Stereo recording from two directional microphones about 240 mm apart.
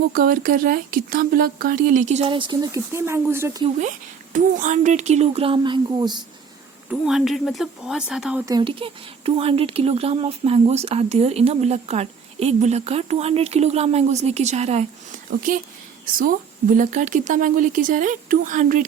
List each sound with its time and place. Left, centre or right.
0.1 s speech: right; by 3.7 s centre
3.8 s speech: right
6.9 s speech: centre
8.4 s speech: centre
16.1 s speech: right